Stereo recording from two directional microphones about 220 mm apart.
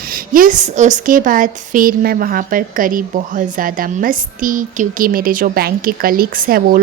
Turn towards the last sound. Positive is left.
turn(degrees=-40)  # may be behind; listen again after turning